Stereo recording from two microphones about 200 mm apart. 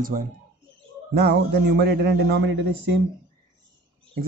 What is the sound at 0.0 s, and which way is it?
Speech, 45° right (ahead or behind).